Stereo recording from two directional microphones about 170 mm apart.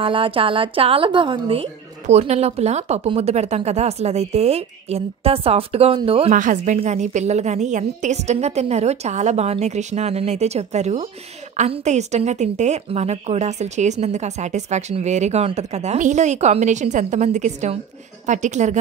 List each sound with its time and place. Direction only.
0.0 s a woman's voice: 30° right (ahead or behind)
6.3 s a woman's voice: 50° right (ahead or behind)